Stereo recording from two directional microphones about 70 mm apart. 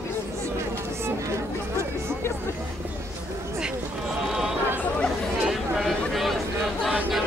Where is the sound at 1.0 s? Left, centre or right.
Right.